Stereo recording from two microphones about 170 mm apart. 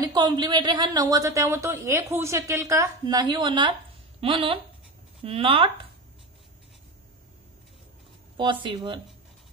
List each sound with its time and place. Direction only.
0.0 s speech: 25° right (ahead or behind)
8.4 s speech: 30° right (ahead or behind)